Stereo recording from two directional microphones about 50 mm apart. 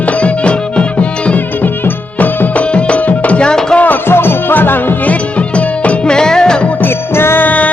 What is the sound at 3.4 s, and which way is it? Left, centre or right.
Music, centre.